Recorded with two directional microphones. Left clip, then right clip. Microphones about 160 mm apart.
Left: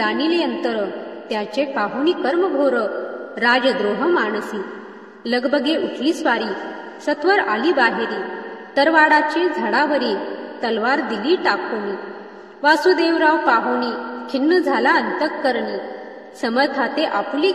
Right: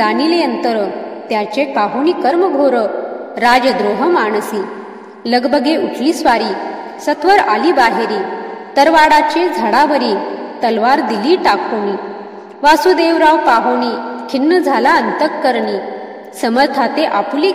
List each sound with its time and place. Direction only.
0.0 s a woman's voice: 35° right (ahead or behind)
12.6 s a woman's voice: 35° right (ahead or behind)